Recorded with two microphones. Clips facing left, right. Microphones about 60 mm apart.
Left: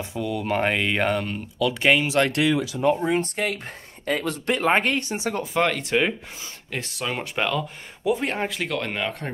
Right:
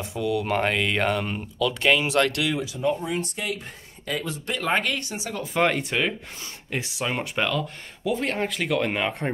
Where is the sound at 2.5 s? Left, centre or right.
Left.